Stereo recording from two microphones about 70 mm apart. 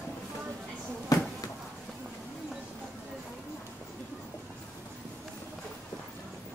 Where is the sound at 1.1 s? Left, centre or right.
Left.